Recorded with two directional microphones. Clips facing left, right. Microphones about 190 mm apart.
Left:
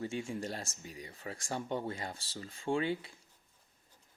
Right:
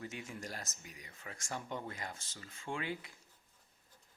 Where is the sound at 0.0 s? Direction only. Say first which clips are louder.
Left 8 dB; 30° left (ahead or behind).